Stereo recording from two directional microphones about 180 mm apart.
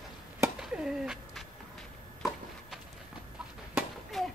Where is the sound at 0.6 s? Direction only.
5° right (ahead or behind).